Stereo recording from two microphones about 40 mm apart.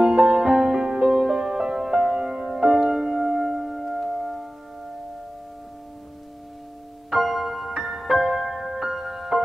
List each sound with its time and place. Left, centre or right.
0.1 s music: centre
7.1 s music: centre